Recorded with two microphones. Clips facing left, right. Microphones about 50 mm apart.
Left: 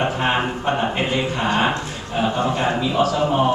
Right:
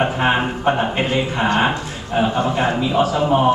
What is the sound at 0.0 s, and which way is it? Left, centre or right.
Speech, centre.